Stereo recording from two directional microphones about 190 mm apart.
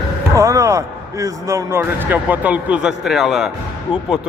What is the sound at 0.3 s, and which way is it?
A man's voice, 15° right (ahead or behind).